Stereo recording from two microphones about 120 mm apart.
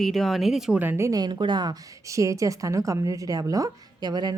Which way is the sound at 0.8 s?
20° right (ahead or behind).